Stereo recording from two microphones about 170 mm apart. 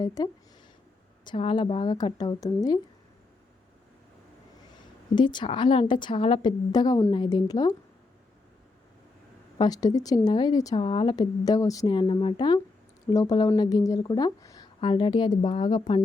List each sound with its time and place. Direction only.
0.0 s a woman's voice: 20° left (ahead or behind)
5.1 s a woman's voice: 25° left (ahead or behind)
9.6 s a woman's voice: 20° left (ahead or behind)
10.8 s a woman's voice: 35° left (ahead or behind)